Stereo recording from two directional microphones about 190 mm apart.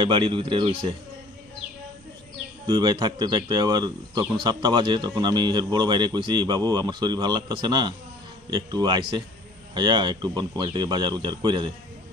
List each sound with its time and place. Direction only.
0.0 s speech: 25° right (ahead or behind)
2.6 s speech: 25° right (ahead or behind)